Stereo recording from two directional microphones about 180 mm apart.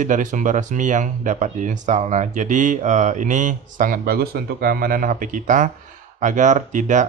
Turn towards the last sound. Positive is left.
turn(degrees=-45)  # may be behind; listen again after turning